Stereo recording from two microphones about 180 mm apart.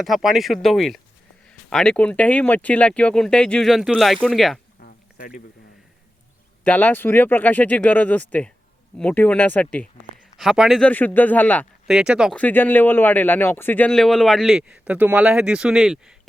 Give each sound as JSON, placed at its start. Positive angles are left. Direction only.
{"t": 0.0, "sound": "speech", "side_deg": 0}
{"t": 4.8, "sound": "a sound", "side_deg": 55}
{"t": 6.7, "sound": "speech", "side_deg": 10}
{"t": 10.3, "sound": "speech", "side_deg": -5}
{"t": 11.9, "sound": "speech", "side_deg": -5}
{"t": 12.4, "sound": "speech", "side_deg": 10}